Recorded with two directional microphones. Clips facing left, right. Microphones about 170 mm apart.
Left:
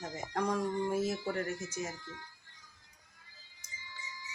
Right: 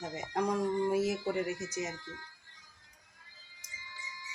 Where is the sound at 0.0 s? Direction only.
15° right (ahead or behind).